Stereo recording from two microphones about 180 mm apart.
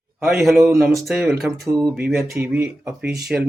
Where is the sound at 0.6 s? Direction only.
Centre (ahead or behind).